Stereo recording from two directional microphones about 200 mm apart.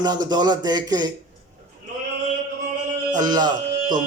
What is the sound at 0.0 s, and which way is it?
A man's voice, 20° right (ahead or behind).